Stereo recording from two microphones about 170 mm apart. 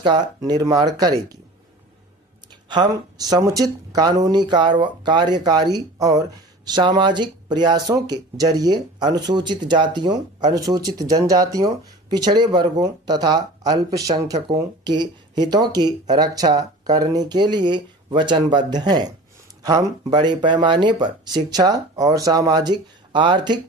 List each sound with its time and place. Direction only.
0.0 s speech: 25° right (ahead or behind)
2.7 s speech: 25° right (ahead or behind)